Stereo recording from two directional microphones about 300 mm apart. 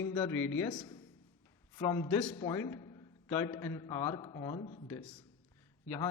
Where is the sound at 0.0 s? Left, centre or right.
Centre.